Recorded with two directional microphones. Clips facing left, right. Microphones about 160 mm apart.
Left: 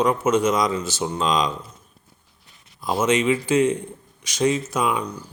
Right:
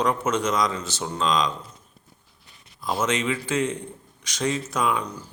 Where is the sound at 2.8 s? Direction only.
15° left (ahead or behind).